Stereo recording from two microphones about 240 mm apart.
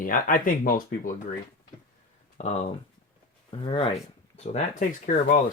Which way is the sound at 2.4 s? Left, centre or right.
Left.